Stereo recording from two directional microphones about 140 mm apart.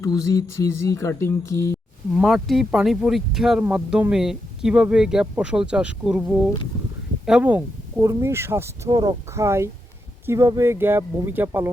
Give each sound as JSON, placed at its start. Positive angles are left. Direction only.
{"t": 0.0, "sound": "speech", "side_deg": 25}
{"t": 2.1, "sound": "speech", "side_deg": 0}